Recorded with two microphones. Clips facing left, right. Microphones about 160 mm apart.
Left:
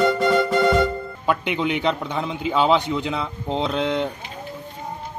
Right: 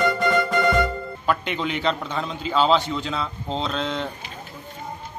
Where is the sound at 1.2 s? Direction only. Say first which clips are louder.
Left 2 dB; 15° left (ahead or behind).